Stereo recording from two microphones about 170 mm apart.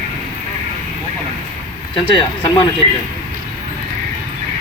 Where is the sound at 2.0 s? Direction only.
25° left (ahead or behind).